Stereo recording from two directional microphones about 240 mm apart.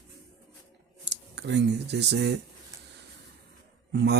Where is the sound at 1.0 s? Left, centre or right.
Right.